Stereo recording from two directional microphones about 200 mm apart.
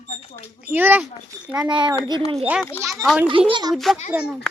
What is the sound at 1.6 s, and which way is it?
Speech, 25° right (ahead or behind).